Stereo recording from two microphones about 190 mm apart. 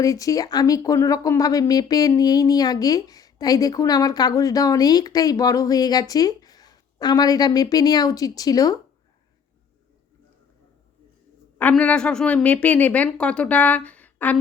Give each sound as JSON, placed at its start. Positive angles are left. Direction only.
{"t": 0.0, "sound": "speech", "side_deg": 15}
{"t": 11.5, "sound": "a woman's voice", "side_deg": 10}